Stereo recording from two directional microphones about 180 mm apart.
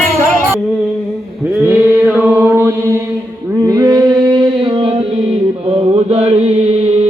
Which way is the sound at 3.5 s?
20° right (ahead or behind).